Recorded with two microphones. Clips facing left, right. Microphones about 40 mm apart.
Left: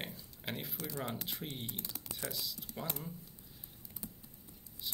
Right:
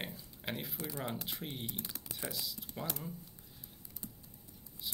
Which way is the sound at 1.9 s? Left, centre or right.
Centre.